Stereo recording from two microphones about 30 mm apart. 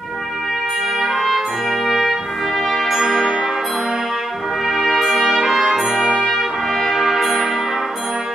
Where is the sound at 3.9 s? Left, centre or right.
Centre.